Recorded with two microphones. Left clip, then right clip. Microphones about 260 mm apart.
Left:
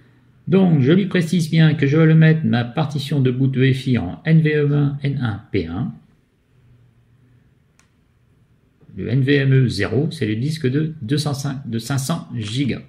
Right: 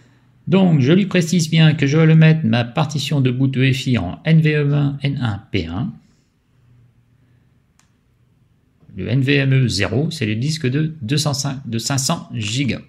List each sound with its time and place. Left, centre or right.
0.5 s speech: right
8.9 s speech: right